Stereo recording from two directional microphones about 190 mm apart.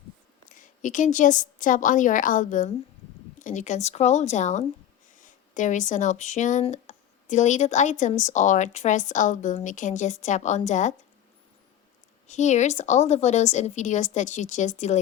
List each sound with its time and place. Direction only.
0.4 s a woman's voice: 40° left (ahead or behind)
12.3 s speech: 40° left (ahead or behind)